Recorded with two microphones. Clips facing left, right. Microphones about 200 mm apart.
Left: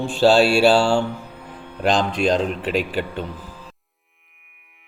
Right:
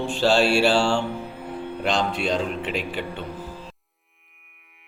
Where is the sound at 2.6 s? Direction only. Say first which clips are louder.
Left 5 dB; 40° left (ahead or behind).